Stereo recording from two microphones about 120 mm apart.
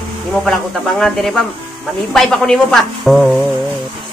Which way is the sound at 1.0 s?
5° left (ahead or behind).